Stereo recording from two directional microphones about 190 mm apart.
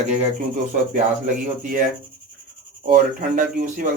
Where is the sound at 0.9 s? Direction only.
45° right (ahead or behind).